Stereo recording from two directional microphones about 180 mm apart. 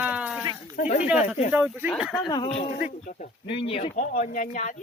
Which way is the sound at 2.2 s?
25° left (ahead or behind).